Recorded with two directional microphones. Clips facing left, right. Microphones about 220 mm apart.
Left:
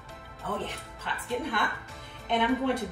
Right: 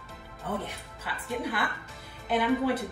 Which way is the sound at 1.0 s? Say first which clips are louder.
Left 1 dB; 5° right (ahead or behind).